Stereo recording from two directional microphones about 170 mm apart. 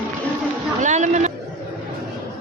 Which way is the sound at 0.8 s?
45° right (ahead or behind).